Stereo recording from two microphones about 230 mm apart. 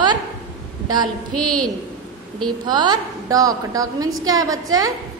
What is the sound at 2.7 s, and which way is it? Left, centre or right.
A woman's voice, centre.